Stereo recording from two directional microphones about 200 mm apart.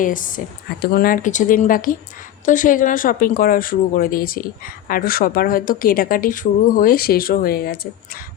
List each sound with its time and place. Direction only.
0.0 s speech: 40° left (ahead or behind)